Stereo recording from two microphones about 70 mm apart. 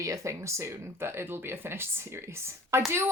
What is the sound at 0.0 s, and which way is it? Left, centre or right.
Speech, right.